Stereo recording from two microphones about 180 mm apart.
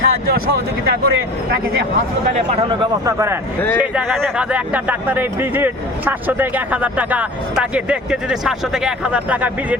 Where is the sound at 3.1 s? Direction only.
15° right (ahead or behind).